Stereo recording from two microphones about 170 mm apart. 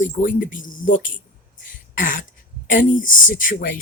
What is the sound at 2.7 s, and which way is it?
Speech, 50° left (ahead or behind).